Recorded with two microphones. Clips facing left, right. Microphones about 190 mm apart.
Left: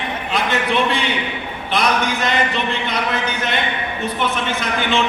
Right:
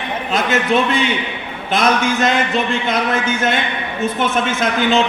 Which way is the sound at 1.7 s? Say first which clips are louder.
Right 3 dB; 45° right (ahead or behind).